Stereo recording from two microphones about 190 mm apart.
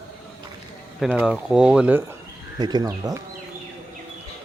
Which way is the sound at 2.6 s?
20° right (ahead or behind).